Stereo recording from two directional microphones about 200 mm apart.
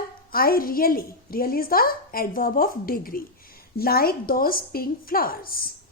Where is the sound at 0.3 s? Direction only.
45° left (ahead or behind).